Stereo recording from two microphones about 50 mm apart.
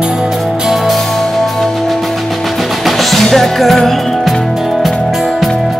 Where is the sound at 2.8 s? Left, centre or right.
Centre.